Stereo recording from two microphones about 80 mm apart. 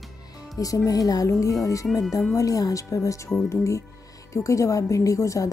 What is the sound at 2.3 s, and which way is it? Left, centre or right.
Speech, left.